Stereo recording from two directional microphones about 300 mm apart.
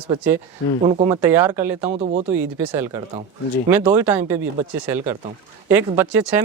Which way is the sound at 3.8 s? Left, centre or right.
Centre.